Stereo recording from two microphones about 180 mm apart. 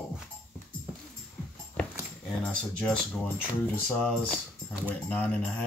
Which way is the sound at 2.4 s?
5° left (ahead or behind).